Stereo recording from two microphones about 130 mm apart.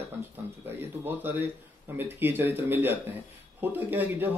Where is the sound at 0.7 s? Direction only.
15° right (ahead or behind).